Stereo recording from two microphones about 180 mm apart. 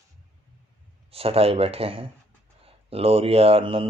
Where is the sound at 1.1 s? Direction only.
35° right (ahead or behind).